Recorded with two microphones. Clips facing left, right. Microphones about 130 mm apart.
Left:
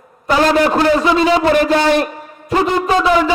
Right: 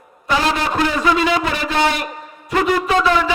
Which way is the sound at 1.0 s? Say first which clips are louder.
Left 4 dB; 30° left (ahead or behind).